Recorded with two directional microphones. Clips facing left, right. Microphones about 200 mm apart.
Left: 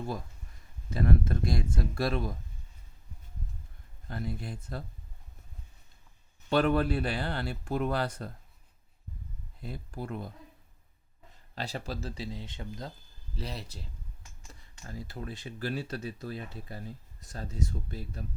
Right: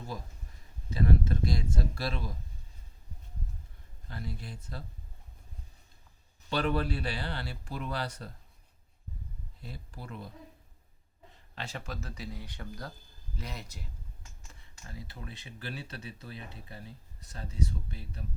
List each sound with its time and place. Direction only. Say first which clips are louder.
0.9 s speech: left 1 dB; 55° left (ahead or behind)
4.1 s speech: left 5 dB; 50° left (ahead or behind)
6.5 s speech: left 5 dB; 50° left (ahead or behind)
9.6 s speech: left 7 dB; 50° left (ahead or behind)
11.5 s speech: left 4 dB; 35° left (ahead or behind)
14.8 s speech: left 5 dB; 45° left (ahead or behind)